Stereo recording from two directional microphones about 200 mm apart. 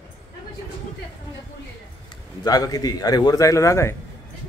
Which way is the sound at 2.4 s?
20° left (ahead or behind).